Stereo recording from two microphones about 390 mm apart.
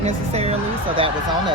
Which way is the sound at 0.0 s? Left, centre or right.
Centre.